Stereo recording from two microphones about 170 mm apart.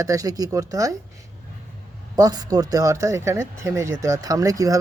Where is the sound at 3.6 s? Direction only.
15° right (ahead or behind).